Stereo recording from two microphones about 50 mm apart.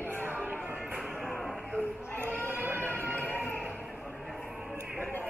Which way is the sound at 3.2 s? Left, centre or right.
Left.